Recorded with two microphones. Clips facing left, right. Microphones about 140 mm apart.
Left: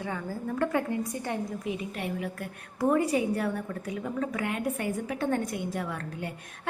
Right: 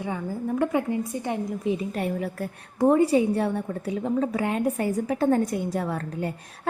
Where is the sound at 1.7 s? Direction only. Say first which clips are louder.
Right 6 dB; 35° right (ahead or behind).